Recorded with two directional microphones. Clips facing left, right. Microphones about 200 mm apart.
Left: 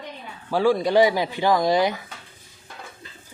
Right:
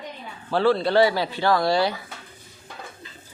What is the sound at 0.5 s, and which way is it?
Speech, 15° left (ahead or behind).